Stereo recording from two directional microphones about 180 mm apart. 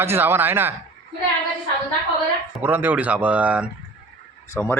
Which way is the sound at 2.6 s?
10° right (ahead or behind).